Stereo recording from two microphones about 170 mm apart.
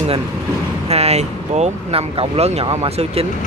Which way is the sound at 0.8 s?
35° right (ahead or behind).